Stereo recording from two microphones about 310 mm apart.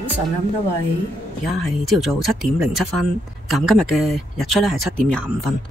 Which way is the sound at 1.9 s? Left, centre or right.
Centre.